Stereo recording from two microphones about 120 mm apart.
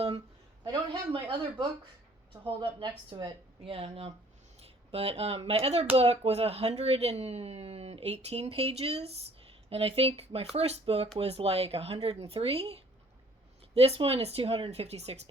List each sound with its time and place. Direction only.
0.7 s speech: 40° right (ahead or behind)
13.7 s speech: 55° right (ahead or behind)